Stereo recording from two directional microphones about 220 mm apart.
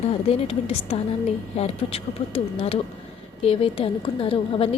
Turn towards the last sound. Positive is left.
turn(degrees=25)  # may be behind; listen again after turning